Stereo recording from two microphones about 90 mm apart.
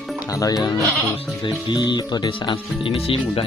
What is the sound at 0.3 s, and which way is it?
Speech, 45° left (ahead or behind).